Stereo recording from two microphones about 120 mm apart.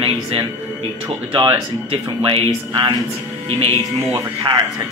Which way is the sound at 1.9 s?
45° right (ahead or behind).